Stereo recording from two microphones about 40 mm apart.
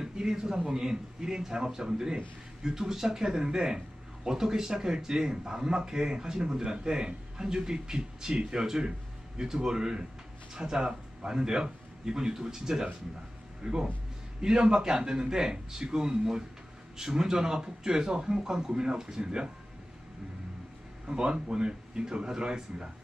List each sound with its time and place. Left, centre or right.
0.0 s a man's voice: centre
13.6 s a man's voice: right
21.1 s a man's voice: centre